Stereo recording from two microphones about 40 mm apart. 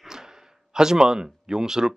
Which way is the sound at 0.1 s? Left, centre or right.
Centre.